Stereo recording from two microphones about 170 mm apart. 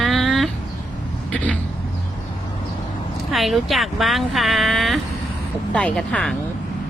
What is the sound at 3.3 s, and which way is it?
Speech, centre (ahead or behind).